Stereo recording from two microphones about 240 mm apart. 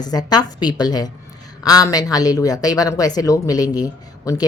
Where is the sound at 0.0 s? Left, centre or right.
Centre.